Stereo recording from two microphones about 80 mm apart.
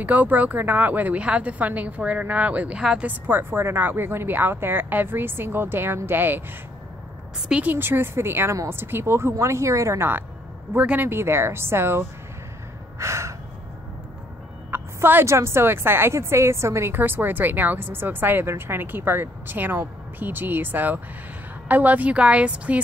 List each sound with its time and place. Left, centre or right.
0.0 s a woman's voice: right
2.8 s a woman's voice: centre
3.1 s a woman's voice: right
7.6 s a woman's voice: right
13.0 s gasp: right
14.7 s a woman's voice: right